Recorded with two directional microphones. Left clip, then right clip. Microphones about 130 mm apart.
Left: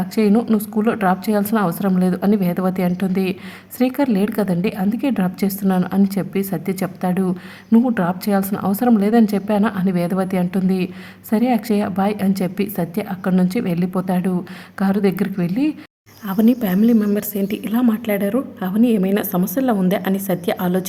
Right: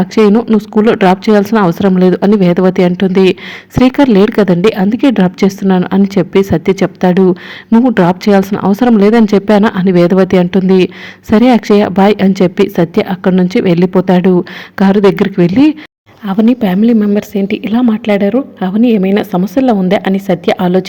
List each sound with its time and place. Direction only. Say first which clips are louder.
0.0 s a woman's voice: right 9 dB; 30° right (ahead or behind)
16.2 s a woman's voice: right 7 dB; 30° right (ahead or behind)